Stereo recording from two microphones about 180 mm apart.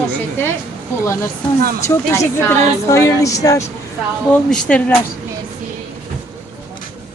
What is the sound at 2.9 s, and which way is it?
Music, 20° left (ahead or behind).